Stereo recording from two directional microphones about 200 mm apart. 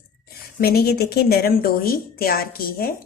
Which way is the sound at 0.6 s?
50° left (ahead or behind).